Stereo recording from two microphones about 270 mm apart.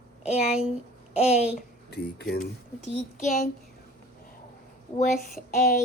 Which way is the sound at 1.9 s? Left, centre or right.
Left.